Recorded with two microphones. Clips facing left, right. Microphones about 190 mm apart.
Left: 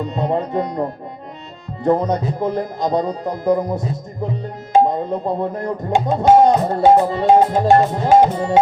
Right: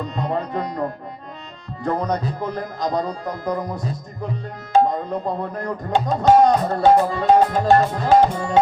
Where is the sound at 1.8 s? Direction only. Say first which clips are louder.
Left 5 dB; 25° left (ahead or behind).